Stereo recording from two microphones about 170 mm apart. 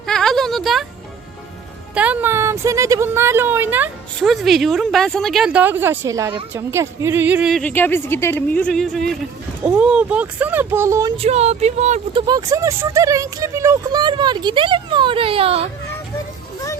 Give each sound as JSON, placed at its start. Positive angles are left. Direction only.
{"t": 0.0, "sound": "a sound", "side_deg": 5}
{"t": 2.0, "sound": "speech", "side_deg": -10}
{"t": 4.2, "sound": "speech", "side_deg": 0}
{"t": 7.7, "sound": "a woman's voice", "side_deg": 10}
{"t": 11.2, "sound": "speech", "side_deg": -40}
{"t": 12.2, "sound": "speech", "side_deg": -20}